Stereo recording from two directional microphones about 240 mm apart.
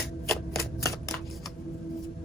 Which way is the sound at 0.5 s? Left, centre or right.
Centre.